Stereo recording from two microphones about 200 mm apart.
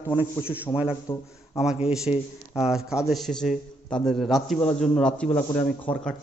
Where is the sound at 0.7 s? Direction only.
15° left (ahead or behind).